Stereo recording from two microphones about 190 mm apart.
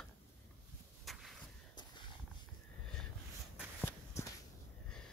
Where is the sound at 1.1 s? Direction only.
Centre (ahead or behind).